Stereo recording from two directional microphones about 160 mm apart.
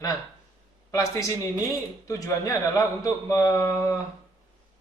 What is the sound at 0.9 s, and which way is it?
A man's voice, 20° left (ahead or behind).